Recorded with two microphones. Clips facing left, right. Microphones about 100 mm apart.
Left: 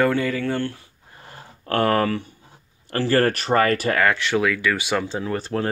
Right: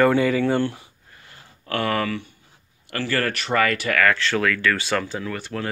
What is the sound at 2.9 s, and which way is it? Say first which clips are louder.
Speech: left 5 dB; 35° left (ahead or behind).